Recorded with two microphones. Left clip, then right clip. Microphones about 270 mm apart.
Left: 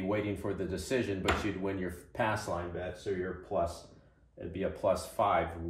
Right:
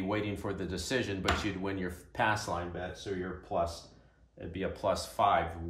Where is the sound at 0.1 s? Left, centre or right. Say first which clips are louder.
Left 2 dB; centre.